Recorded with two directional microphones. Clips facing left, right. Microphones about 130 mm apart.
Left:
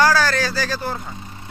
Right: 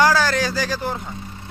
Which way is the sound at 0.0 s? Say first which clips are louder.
Even; 20° right (ahead or behind).